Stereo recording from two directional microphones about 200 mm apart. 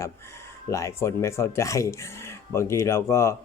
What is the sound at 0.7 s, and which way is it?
Speech, 15° left (ahead or behind).